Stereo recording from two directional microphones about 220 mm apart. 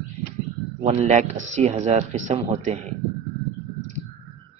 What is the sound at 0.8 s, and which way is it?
Speech, 30° right (ahead or behind).